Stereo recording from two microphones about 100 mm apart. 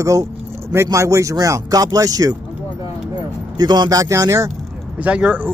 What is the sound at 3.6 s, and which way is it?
Speech, 45° right (ahead or behind).